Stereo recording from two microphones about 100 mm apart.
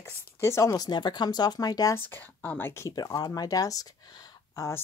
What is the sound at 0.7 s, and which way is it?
Speech, 45° left (ahead or behind).